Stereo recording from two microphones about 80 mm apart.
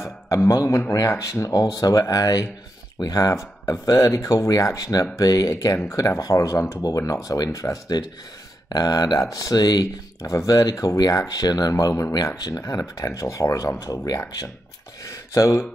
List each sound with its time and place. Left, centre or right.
0.3 s speech: left
6.8 s speech: left
8.6 s speech: left
15.0 s a sound: left